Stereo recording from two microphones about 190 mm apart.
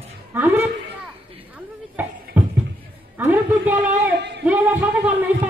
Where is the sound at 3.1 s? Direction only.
10° right (ahead or behind).